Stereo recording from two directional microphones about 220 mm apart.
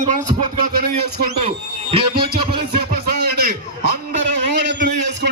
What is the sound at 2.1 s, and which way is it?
Music, 45° right (ahead or behind).